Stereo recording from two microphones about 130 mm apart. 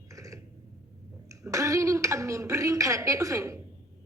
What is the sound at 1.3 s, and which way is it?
A woman's voice, 25° right (ahead or behind).